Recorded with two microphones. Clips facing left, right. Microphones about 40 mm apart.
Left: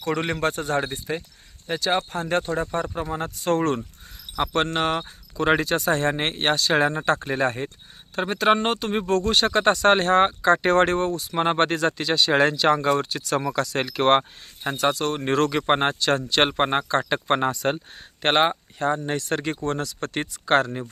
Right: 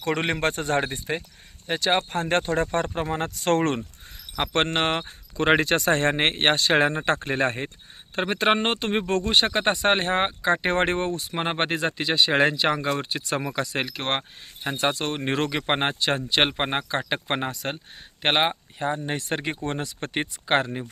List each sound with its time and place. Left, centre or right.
0.0 s speech: right
11.3 s speech: centre
13.8 s speech: centre
14.8 s speech: right
16.5 s speech: centre